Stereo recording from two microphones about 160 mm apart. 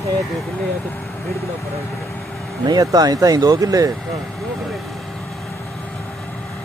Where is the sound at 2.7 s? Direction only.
25° right (ahead or behind).